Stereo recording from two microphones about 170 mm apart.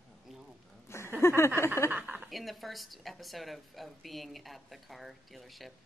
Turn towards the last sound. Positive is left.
turn(degrees=0)  # may be behind; listen again after turning